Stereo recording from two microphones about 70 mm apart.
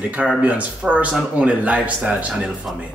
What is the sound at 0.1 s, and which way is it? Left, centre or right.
Speech, centre.